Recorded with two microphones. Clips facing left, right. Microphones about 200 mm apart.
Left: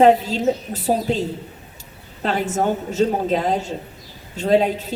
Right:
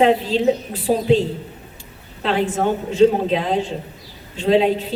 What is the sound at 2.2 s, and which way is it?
A woman's voice, 45° left (ahead or behind).